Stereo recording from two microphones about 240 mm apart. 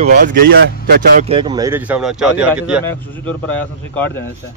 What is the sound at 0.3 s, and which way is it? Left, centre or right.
Speech, right.